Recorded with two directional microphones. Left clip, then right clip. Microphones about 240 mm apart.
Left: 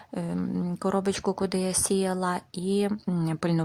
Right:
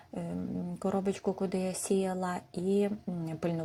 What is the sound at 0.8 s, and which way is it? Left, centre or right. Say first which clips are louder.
A woman's voice: left 5 dB; centre.